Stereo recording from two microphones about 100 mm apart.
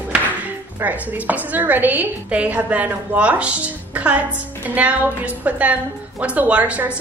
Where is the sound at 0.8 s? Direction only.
15° right (ahead or behind).